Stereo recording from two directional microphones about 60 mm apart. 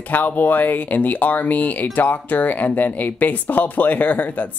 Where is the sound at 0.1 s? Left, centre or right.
Left.